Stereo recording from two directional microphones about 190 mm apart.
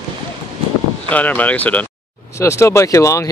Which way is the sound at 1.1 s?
10° left (ahead or behind).